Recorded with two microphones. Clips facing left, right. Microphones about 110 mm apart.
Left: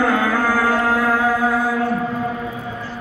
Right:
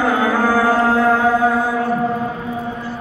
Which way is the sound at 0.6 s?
25° right (ahead or behind).